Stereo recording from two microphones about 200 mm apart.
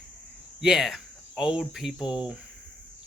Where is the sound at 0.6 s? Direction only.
Centre (ahead or behind).